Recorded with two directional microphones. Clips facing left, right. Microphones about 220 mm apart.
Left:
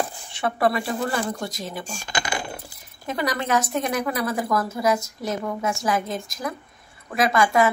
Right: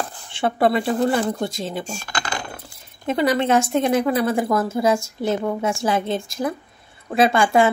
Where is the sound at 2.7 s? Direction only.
25° right (ahead or behind).